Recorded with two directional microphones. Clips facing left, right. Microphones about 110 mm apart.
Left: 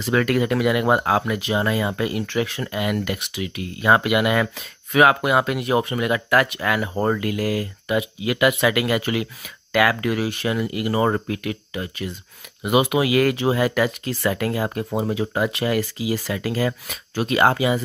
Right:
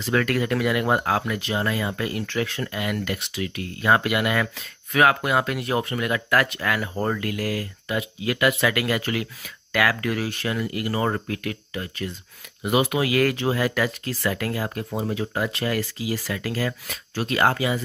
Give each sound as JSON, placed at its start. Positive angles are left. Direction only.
{"t": 0.0, "sound": "speech", "side_deg": 15}